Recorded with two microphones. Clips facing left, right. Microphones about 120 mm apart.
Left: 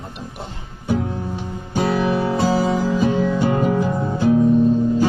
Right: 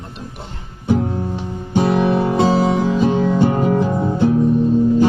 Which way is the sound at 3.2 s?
25° right (ahead or behind).